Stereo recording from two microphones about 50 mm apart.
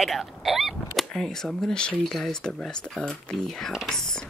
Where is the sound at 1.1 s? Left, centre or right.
Centre.